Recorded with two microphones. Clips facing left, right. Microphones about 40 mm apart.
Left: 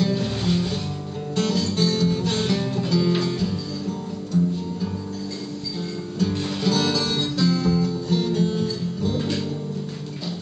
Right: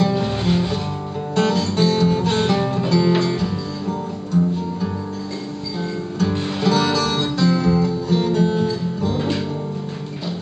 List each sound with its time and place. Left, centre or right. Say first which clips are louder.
0.0 s music: right 4 dB; right
6.1 s music: right 2 dB; right